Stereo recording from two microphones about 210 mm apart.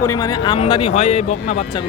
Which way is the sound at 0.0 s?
15° left (ahead or behind).